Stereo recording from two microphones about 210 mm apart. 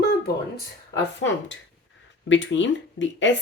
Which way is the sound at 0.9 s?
60° left (ahead or behind).